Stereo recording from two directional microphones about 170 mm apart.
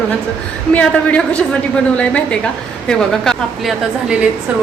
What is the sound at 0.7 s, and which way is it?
A woman's voice, 5° left (ahead or behind).